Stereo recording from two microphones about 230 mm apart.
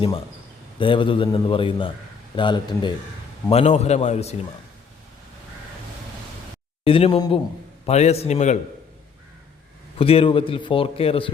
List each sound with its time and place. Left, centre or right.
0.8 s a man's voice: left
6.8 s a man's voice: left
10.0 s a man's voice: left